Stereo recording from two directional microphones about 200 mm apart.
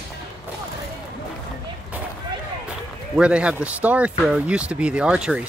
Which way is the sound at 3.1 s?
5° right (ahead or behind).